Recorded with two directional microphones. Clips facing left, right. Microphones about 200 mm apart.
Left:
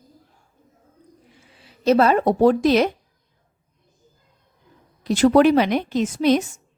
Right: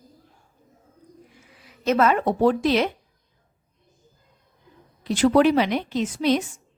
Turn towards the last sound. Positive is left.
turn(degrees=45)  # may be behind; listen again after turning